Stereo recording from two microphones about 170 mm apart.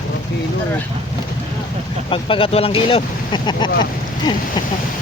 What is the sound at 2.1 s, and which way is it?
Speech, 30° left (ahead or behind).